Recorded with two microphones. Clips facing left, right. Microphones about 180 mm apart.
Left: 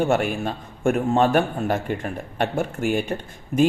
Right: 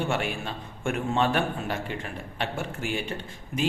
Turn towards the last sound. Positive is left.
turn(degrees=50)  # may be behind; listen again after turning